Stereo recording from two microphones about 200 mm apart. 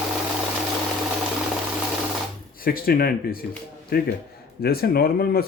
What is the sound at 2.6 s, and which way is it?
Speech, 50° left (ahead or behind).